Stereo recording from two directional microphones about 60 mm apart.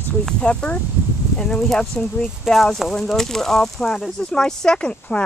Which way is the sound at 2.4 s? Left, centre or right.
Centre.